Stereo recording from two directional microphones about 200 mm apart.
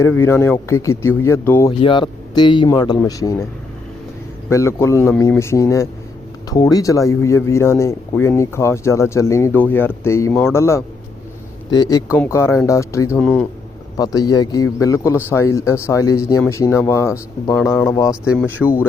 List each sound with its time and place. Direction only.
0.0 s speech: 10° left (ahead or behind)
1.8 s speech: 25° left (ahead or behind)
4.4 s speech: 15° left (ahead or behind)
13.9 s speech: 20° left (ahead or behind)
18.1 s speech: 5° left (ahead or behind)